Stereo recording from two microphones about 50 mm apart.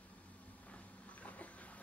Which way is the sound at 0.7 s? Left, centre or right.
Left.